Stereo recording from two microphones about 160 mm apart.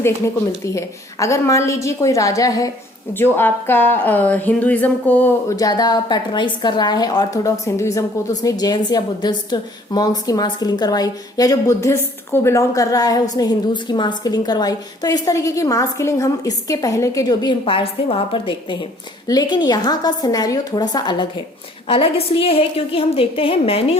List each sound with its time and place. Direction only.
0.6 s a woman's voice: 20° left (ahead or behind)
5.5 s a woman's voice: 25° left (ahead or behind)